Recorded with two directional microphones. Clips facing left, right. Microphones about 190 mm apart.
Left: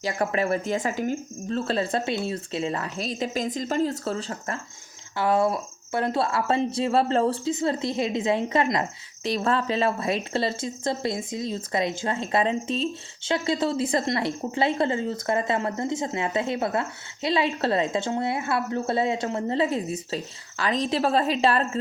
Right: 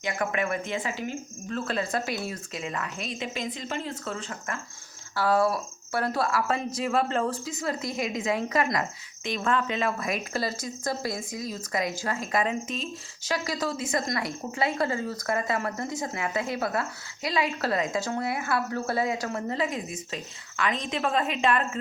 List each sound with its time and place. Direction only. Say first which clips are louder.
0.0 s speech: left 3 dB; 35° left (ahead or behind)
1.5 s speech: left 4 dB; 30° left (ahead or behind)
5.1 s speech: left 1 dB; 20° left (ahead or behind)